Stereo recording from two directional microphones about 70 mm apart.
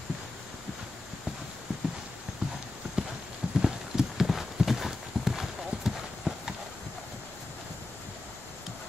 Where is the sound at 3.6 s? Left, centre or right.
Centre.